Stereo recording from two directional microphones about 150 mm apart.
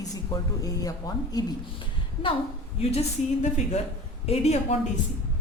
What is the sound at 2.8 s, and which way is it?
A woman's voice, 45° left (ahead or behind).